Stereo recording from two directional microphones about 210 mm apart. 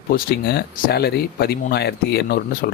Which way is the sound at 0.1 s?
45° left (ahead or behind).